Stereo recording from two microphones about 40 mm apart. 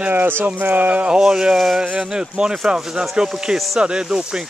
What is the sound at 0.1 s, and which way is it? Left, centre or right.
Speech, right.